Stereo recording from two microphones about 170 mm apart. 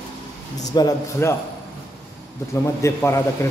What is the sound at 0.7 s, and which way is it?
Speech, 20° left (ahead or behind).